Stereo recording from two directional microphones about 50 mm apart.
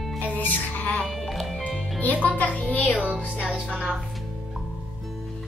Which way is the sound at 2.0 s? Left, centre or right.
Left.